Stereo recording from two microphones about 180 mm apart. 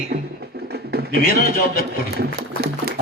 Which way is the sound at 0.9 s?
60° right (ahead or behind).